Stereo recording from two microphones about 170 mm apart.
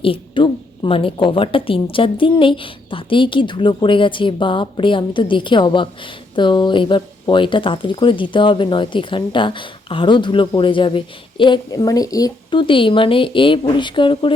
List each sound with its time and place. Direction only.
0.0 s speech: 30° left (ahead or behind)